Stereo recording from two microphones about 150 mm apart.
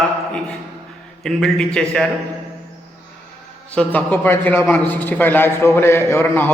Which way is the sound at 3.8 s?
10° left (ahead or behind).